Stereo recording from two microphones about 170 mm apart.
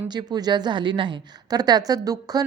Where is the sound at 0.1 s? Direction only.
25° right (ahead or behind).